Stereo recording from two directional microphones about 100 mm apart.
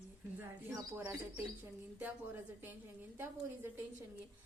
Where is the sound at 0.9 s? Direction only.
25° right (ahead or behind).